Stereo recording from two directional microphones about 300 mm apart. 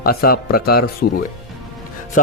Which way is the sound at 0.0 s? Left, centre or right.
Left.